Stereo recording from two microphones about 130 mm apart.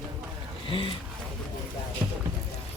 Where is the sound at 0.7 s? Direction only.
45° left (ahead or behind).